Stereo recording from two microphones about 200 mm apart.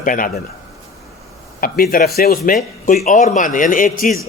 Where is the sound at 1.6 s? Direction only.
45° left (ahead or behind).